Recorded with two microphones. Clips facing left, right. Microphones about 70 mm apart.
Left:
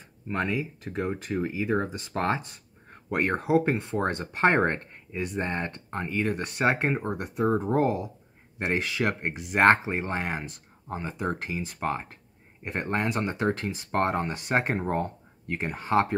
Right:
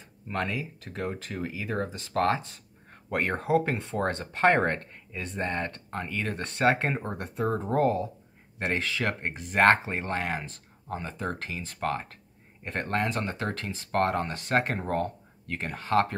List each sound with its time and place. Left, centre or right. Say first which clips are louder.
0.3 s speech: left 3 dB; left